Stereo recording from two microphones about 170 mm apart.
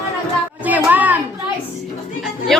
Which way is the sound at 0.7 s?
10° right (ahead or behind).